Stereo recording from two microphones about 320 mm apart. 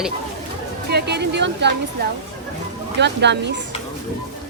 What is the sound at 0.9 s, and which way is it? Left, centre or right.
Speech, right.